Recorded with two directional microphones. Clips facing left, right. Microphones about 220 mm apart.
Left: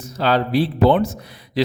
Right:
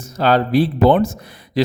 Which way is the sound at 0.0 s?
50° right (ahead or behind).